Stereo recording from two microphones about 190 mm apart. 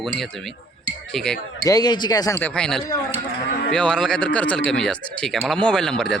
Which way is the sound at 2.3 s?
5° left (ahead or behind).